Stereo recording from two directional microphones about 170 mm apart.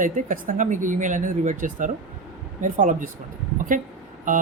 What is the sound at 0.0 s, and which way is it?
Speech, 50° right (ahead or behind).